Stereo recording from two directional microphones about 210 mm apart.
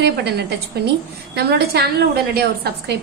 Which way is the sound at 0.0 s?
50° right (ahead or behind).